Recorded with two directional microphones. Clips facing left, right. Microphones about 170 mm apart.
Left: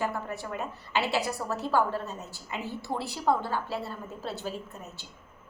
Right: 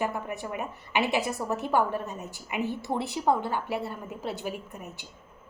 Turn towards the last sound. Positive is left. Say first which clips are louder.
# right 1 dB
turn(degrees=-15)  # may be behind; listen again after turning